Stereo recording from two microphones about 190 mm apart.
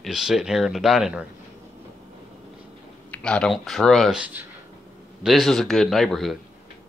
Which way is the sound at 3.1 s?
5° left (ahead or behind).